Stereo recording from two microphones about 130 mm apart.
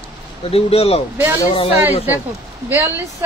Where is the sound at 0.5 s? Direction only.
50° left (ahead or behind).